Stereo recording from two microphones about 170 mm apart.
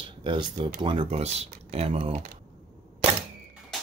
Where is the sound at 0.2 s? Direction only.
30° right (ahead or behind).